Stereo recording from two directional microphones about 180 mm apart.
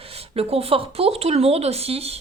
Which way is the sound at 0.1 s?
35° right (ahead or behind).